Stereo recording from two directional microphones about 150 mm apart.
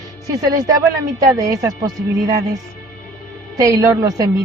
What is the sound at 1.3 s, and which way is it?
Speech, 25° right (ahead or behind).